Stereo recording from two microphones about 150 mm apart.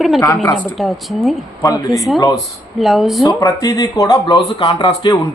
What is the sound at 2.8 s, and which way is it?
Speech, centre (ahead or behind).